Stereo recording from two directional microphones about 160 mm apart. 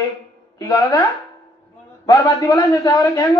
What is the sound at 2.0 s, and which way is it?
A man's voice, 20° left (ahead or behind).